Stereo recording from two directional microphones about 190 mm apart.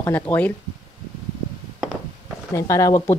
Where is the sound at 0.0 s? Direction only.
10° left (ahead or behind).